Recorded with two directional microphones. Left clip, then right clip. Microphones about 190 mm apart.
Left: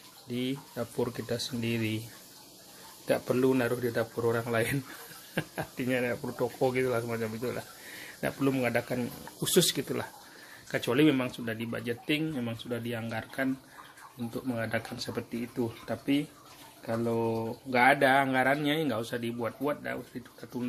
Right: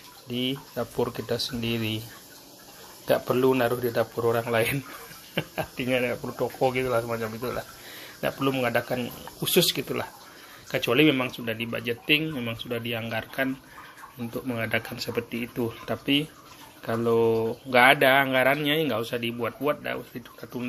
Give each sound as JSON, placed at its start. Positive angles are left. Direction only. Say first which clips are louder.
{"t": 0.3, "sound": "speech", "louder": "right 5 dB", "side_deg": 15}
{"t": 3.1, "sound": "speech", "louder": "right 5 dB", "side_deg": 15}
{"t": 14.5, "sound": "speech", "louder": "right 5 dB", "side_deg": 10}